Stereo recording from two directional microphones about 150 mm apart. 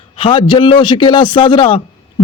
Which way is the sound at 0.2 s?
35° left (ahead or behind).